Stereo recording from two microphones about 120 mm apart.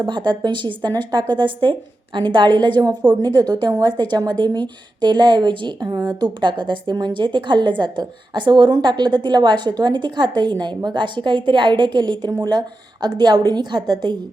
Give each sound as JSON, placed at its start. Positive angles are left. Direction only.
{"t": 0.0, "sound": "a woman's voice", "side_deg": -40}